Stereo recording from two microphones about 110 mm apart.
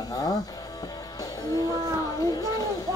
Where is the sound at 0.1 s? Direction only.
35° left (ahead or behind).